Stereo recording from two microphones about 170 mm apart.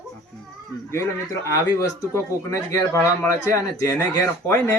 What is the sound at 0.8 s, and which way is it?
Speech, 15° left (ahead or behind).